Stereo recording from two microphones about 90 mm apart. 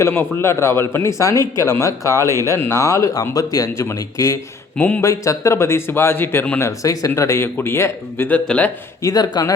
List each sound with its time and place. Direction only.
0.1 s a man's voice: 25° left (ahead or behind)
4.8 s speech: 20° left (ahead or behind)
5.0 s a man's voice: 35° left (ahead or behind); by 6.6 s 20° left (ahead or behind)
6.6 s a man's voice: 35° left (ahead or behind)
8.3 s speech: 15° left (ahead or behind)
9.0 s speech: 45° left (ahead or behind)